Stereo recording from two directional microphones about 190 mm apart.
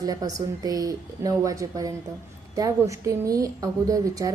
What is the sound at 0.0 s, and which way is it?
A woman's voice, 20° right (ahead or behind).